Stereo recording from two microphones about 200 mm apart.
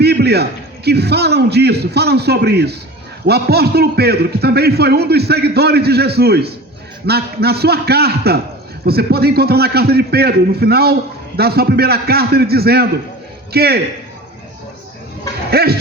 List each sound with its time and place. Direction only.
0.0 s a sound: 55° right (ahead or behind)
0.9 s a man's voice: 55° right (ahead or behind)
15.4 s speech: 50° right (ahead or behind)